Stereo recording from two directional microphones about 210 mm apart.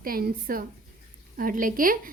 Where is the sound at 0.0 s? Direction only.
45° right (ahead or behind).